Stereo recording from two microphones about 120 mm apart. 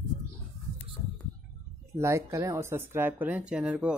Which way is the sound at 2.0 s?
25° right (ahead or behind).